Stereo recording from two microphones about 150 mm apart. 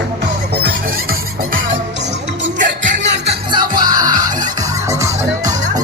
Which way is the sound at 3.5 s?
30° right (ahead or behind).